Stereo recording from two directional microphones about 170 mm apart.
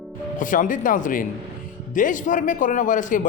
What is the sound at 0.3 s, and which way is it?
A man's voice, 50° left (ahead or behind).